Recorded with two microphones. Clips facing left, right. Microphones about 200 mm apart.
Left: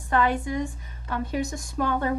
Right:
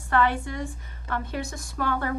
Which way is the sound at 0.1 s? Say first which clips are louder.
Left 1 dB; 15° left (ahead or behind).